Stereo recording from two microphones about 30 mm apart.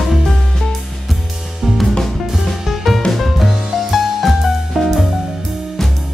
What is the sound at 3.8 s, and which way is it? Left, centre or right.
Music, centre.